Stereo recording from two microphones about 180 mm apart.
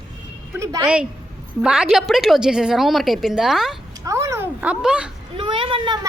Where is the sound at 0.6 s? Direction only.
20° right (ahead or behind).